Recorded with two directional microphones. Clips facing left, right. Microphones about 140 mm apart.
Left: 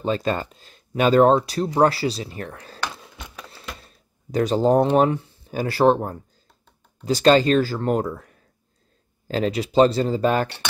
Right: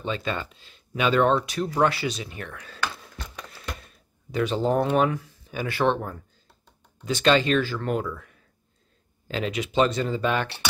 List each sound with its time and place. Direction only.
0.0 s speech: 40° left (ahead or behind)
2.8 s a sound: 10° left (ahead or behind)
3.8 s speech: 40° left (ahead or behind)